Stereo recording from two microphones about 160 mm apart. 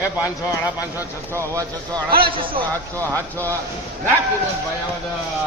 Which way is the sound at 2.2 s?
30° right (ahead or behind).